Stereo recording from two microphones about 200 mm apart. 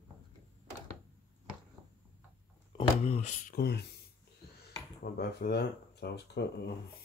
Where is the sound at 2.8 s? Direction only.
30° left (ahead or behind); by 4.0 s 55° left (ahead or behind).